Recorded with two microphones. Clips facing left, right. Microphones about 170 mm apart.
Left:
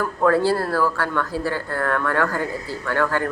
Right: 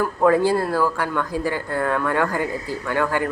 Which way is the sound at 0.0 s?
15° right (ahead or behind).